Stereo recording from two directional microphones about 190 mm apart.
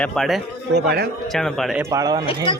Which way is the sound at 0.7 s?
60° right (ahead or behind).